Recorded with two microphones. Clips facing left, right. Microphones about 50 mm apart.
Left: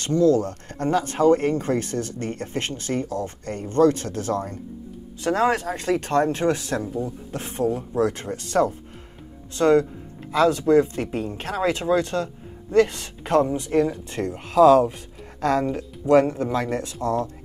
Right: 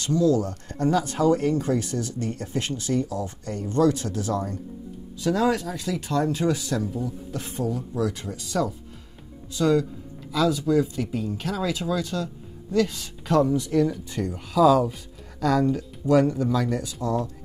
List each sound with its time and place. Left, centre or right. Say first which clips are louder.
0.0 s speech: left 3 dB; left